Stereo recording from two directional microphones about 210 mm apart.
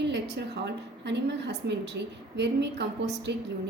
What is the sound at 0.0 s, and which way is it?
A woman's voice, 55° right (ahead or behind).